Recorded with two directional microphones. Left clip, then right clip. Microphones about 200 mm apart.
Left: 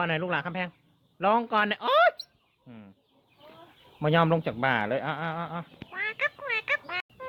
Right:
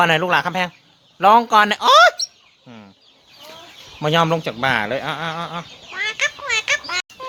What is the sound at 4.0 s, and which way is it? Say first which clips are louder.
Speech: right 7 dB; 15° right (ahead or behind).